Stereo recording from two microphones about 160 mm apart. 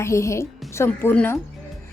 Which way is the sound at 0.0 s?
20° left (ahead or behind).